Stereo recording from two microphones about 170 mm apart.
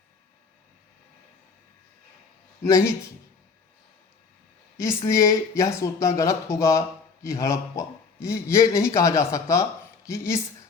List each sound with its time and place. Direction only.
2.6 s speech: 15° left (ahead or behind)
4.8 s speech: 15° left (ahead or behind)